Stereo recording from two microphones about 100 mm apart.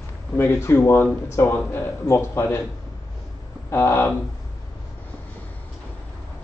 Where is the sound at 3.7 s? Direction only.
25° left (ahead or behind).